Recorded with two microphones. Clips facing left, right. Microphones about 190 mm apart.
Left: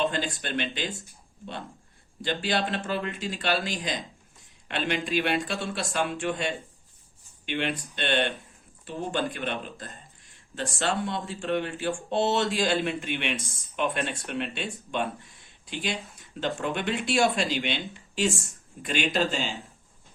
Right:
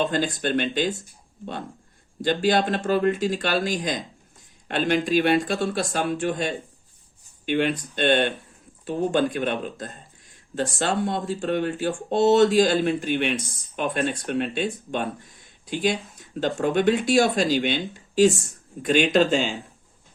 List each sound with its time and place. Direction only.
0.1 s speech: 40° right (ahead or behind)
2.2 s speech: 45° right (ahead or behind)